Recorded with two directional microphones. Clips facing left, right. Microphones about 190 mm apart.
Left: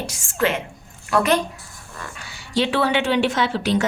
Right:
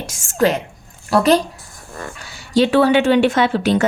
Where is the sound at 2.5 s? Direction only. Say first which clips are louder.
Right 7 dB; 45° right (ahead or behind).